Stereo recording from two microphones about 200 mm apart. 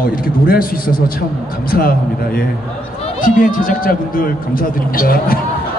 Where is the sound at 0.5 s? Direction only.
45° left (ahead or behind).